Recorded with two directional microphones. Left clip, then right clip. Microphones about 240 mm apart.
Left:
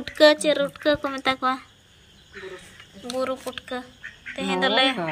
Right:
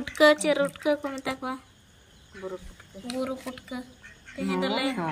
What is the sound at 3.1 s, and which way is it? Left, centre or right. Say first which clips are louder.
A woman's voice: left 5 dB; centre.